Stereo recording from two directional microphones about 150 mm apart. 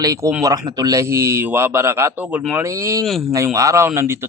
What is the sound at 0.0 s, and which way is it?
A man's voice, 25° right (ahead or behind).